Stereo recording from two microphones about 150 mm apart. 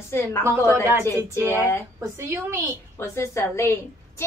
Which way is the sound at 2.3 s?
20° right (ahead or behind).